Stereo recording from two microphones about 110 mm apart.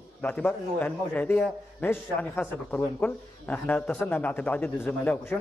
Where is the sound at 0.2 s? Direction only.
15° left (ahead or behind).